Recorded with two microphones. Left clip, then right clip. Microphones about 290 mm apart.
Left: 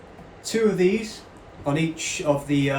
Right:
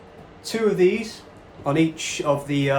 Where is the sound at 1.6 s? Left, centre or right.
Right.